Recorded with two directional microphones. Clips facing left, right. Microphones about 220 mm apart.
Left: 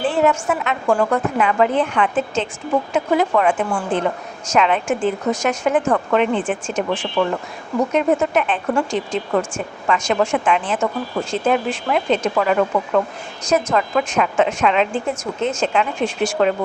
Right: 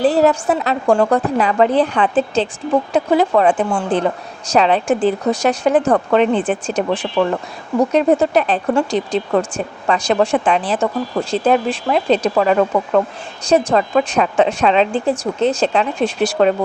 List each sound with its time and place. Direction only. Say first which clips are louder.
0.0 s a woman's voice: right 4 dB; 40° right (ahead or behind)